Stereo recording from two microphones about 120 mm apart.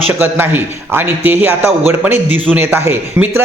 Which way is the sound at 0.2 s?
15° right (ahead or behind).